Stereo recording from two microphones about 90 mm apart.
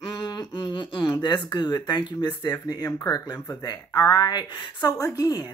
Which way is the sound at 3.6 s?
45° left (ahead or behind).